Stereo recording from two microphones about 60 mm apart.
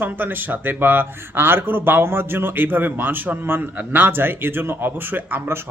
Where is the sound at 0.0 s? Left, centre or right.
Right.